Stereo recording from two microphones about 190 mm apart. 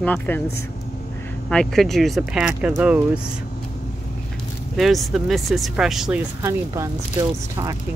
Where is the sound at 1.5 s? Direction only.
Centre (ahead or behind).